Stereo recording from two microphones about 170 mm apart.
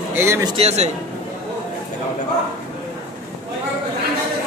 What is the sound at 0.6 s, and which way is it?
Speech, 40° right (ahead or behind).